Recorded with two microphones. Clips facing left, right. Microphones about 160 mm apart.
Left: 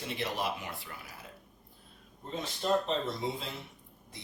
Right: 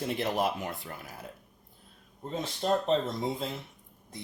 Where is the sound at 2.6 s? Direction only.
40° right (ahead or behind).